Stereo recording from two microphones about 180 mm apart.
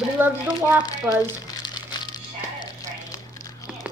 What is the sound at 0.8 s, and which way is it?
Crumpling, 20° left (ahead or behind).